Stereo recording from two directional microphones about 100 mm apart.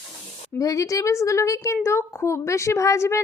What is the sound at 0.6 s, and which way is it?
A woman's voice, 35° left (ahead or behind).